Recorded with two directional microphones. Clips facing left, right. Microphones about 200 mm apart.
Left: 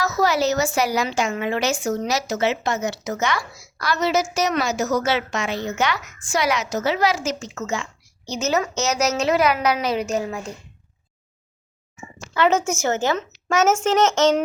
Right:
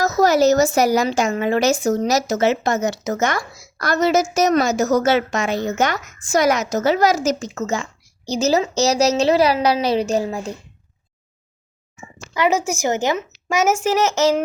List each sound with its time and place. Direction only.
0.0 s a woman's voice: 40° right (ahead or behind)
12.3 s speech: 10° right (ahead or behind)